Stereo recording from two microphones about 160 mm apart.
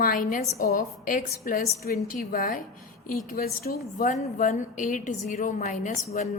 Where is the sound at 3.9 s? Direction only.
55° left (ahead or behind).